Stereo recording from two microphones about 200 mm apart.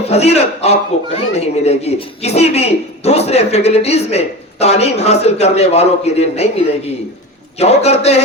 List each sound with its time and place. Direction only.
0.1 s speech: 30° left (ahead or behind)